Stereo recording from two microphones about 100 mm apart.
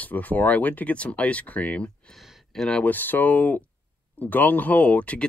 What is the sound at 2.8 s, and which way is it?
Speech, 20° left (ahead or behind).